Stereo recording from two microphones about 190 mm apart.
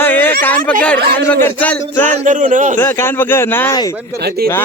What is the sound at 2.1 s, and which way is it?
Speech, 40° right (ahead or behind).